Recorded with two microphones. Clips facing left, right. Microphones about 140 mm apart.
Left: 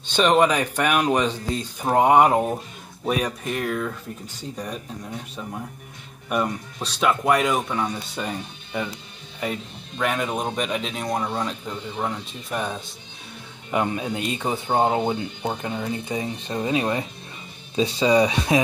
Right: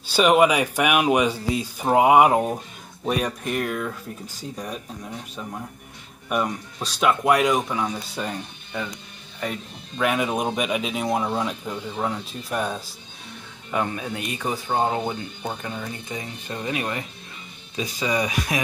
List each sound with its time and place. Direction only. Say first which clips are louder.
0.0 s speech: right 1 dB; 10° right (ahead or behind)
6.2 s speech: even; centre (ahead or behind)
9.5 s speech: left 2 dB; centre (ahead or behind)
13.7 s speech: left 2 dB; 20° left (ahead or behind)